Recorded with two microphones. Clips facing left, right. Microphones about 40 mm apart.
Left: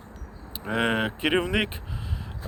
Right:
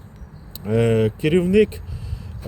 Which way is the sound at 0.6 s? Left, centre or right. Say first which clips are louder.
Right 7 dB; left.